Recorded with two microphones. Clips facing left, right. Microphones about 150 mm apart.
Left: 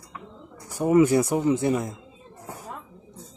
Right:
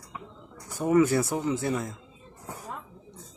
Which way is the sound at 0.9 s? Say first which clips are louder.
Left 4 dB; 15° left (ahead or behind).